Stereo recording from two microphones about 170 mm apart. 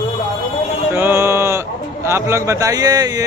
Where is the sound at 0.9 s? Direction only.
15° right (ahead or behind).